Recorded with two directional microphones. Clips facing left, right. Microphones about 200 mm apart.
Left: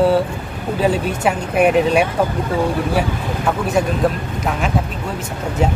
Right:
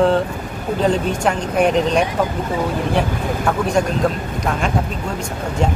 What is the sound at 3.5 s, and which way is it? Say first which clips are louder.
Speech: even; 5° left (ahead or behind).